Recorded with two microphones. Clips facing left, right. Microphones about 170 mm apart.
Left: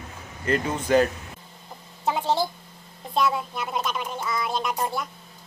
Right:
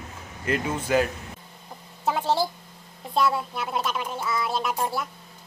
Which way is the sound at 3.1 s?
5° right (ahead or behind).